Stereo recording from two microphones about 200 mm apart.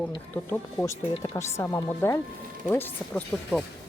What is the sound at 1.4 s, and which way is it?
Speech, 15° left (ahead or behind).